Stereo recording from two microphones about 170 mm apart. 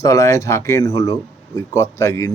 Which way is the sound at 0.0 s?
20° left (ahead or behind).